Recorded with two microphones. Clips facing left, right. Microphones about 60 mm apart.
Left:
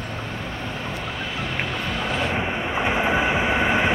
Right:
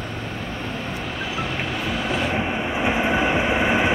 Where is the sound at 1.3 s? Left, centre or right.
Centre.